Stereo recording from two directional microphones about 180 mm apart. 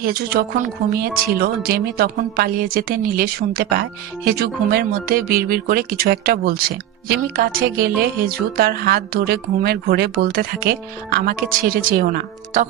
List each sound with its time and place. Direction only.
0.0 s speech: 60° right (ahead or behind)